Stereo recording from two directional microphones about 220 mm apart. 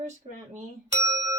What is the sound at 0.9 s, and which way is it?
Music, 15° right (ahead or behind).